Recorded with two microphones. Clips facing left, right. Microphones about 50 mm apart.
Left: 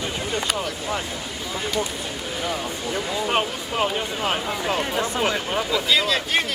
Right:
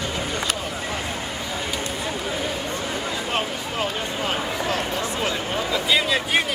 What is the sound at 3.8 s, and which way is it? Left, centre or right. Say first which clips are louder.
Speech: left 3 dB; centre.